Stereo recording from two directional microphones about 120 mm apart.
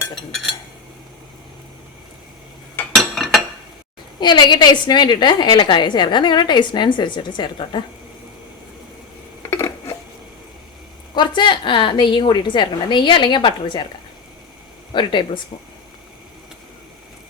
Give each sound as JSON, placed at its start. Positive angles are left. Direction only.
{"t": 0.1, "sound": "speech", "side_deg": 0}
{"t": 2.9, "sound": "a sound", "side_deg": 0}
{"t": 4.2, "sound": "a woman's voice", "side_deg": 40}
{"t": 9.5, "sound": "a sound", "side_deg": 25}
{"t": 11.1, "sound": "a woman's voice", "side_deg": 40}
{"t": 14.9, "sound": "a woman's voice", "side_deg": 40}